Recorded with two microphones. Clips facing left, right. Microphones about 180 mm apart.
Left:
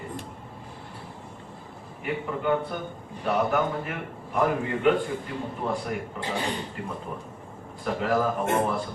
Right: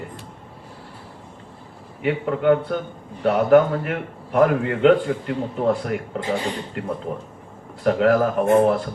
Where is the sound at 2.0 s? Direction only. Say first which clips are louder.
Right 9 dB; 75° right (ahead or behind).